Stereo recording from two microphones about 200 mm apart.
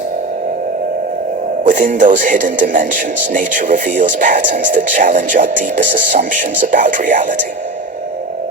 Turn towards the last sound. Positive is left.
turn(degrees=-40)  # may be behind; listen again after turning